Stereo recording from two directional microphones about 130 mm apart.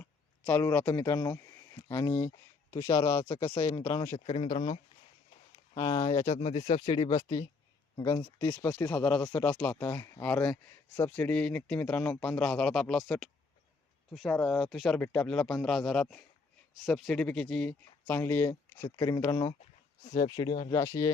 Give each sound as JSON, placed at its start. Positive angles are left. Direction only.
{"t": 0.0, "sound": "speech", "side_deg": 15}
{"t": 3.5, "sound": "speech", "side_deg": 40}
{"t": 4.1, "sound": "speech", "side_deg": 60}
{"t": 5.7, "sound": "speech", "side_deg": 25}
{"t": 6.1, "sound": "speech", "side_deg": 50}
{"t": 6.8, "sound": "speech", "side_deg": 35}
{"t": 7.9, "sound": "speech", "side_deg": 20}
{"t": 18.1, "sound": "speech", "side_deg": 15}
{"t": 18.9, "sound": "speech", "side_deg": 30}
{"t": 20.7, "sound": "speech", "side_deg": 20}